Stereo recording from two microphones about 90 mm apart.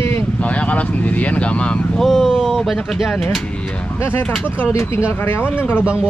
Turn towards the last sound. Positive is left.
turn(degrees=25)  # may be behind; listen again after turning